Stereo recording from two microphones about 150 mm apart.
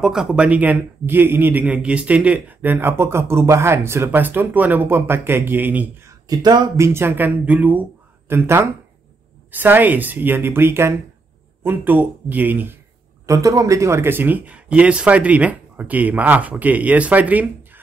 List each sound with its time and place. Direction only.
0.0 s a man's voice: 5° right (ahead or behind)
6.2 s speech: 25° right (ahead or behind)
6.9 s a man's voice: 15° right (ahead or behind)